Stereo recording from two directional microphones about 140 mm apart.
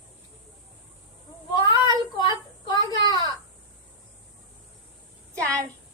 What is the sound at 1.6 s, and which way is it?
Child singing, 35° left (ahead or behind).